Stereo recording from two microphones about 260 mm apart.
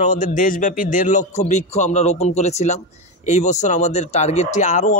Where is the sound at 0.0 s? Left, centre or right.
Left.